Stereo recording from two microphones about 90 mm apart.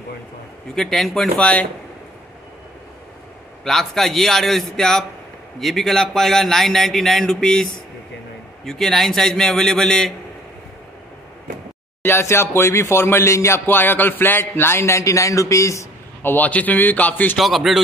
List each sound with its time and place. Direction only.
0.7 s a man's voice: 5° left (ahead or behind)
3.6 s a man's voice: 5° left (ahead or behind)
12.0 s speech: 30° left (ahead or behind)
16.2 s speech: 20° left (ahead or behind)
17.4 s a man's voice: centre (ahead or behind)